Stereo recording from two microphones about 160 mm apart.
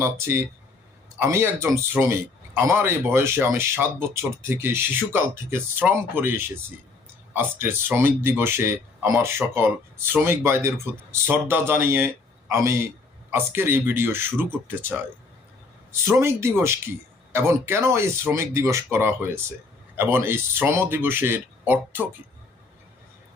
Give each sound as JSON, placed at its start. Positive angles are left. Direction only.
{"t": 0.0, "sound": "a man's voice", "side_deg": -15}